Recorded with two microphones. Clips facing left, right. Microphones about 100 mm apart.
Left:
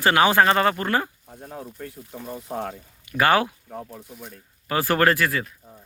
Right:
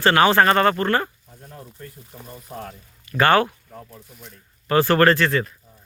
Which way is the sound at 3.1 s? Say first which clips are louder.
Right 2 dB; 10° left (ahead or behind).